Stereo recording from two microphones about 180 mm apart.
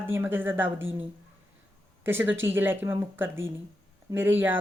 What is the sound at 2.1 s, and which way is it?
Speech, 10° right (ahead or behind).